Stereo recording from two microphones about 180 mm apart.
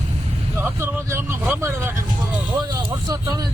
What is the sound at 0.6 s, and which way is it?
Speech, 15° right (ahead or behind).